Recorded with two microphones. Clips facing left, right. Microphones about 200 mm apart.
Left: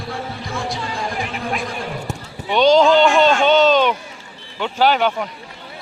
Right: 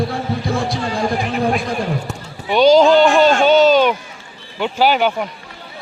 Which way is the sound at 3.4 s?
5° right (ahead or behind).